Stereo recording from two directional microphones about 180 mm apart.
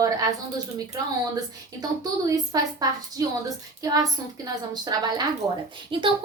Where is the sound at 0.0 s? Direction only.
20° right (ahead or behind).